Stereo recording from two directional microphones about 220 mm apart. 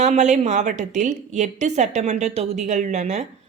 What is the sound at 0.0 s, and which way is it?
A woman's voice, 30° right (ahead or behind).